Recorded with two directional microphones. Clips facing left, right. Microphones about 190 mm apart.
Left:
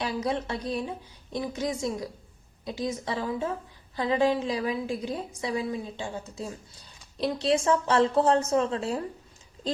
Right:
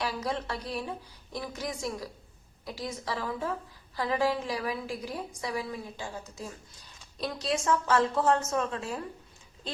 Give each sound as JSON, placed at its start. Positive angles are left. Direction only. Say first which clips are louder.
{"t": 0.0, "sound": "a woman's voice", "louder": "left 3 dB", "side_deg": 20}